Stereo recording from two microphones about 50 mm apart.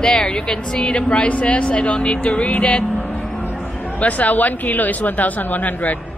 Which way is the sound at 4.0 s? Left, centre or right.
Left.